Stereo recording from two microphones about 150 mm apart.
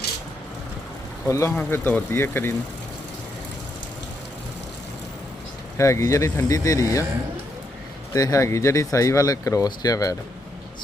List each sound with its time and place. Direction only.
1.3 s speech: 15° left (ahead or behind)
5.7 s speech: 20° left (ahead or behind)
8.1 s speech: 20° left (ahead or behind)